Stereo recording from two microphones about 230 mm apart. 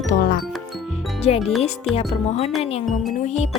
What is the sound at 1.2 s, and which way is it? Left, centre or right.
Music, left.